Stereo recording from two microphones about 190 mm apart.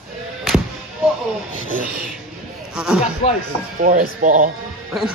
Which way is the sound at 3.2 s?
30° left (ahead or behind).